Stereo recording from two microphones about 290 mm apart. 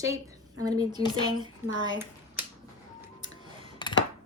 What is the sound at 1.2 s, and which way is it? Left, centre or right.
Speech, centre.